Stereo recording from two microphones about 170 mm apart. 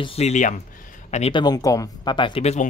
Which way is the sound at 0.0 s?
35° left (ahead or behind).